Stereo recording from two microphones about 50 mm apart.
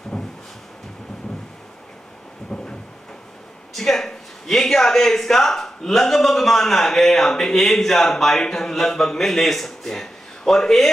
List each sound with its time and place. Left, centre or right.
0.1 s drawer open or close: centre
2.5 s thunder: centre
3.7 s speech: centre